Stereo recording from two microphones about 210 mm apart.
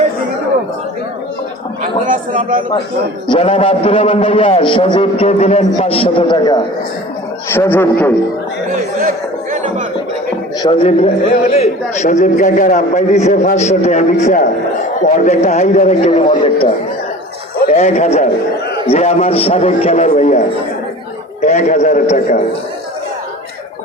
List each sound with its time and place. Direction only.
1.8 s a man's voice: 40° right (ahead or behind)
3.2 s a man's voice: 25° left (ahead or behind)
7.5 s a man's voice: 10° left (ahead or behind)
9.0 s a sound: 40° right (ahead or behind)
10.6 s a man's voice: 25° left (ahead or behind)
17.7 s a man's voice: 30° left (ahead or behind)
21.4 s a man's voice: 35° left (ahead or behind)